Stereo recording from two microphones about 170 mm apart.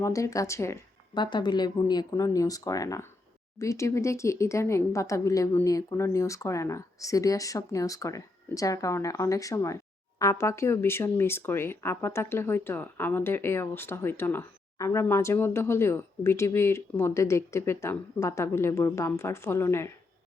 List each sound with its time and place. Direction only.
0.0 s speech: 20° left (ahead or behind)
1.2 s speech: 25° left (ahead or behind)